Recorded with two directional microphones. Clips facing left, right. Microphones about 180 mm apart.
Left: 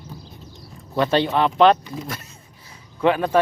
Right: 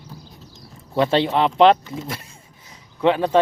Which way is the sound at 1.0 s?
25° right (ahead or behind).